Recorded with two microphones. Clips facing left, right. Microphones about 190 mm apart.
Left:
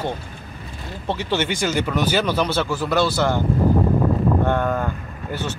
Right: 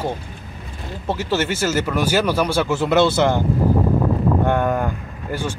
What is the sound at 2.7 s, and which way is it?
Speech, 25° right (ahead or behind).